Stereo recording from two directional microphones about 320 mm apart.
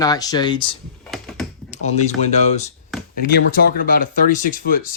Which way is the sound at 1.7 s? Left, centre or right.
Left.